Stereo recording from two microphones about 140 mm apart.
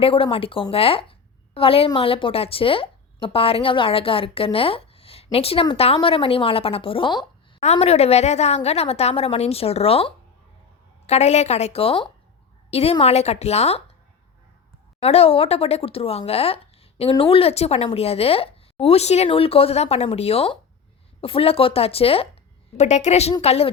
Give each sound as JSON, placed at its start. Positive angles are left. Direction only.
{"t": 0.0, "sound": "a woman's voice", "side_deg": 40}
{"t": 7.6, "sound": "speech", "side_deg": 50}
{"t": 15.0, "sound": "speech", "side_deg": 45}
{"t": 22.8, "sound": "speech", "side_deg": 55}